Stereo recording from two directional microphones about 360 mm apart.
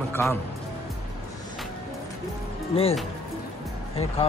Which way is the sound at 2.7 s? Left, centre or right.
Centre.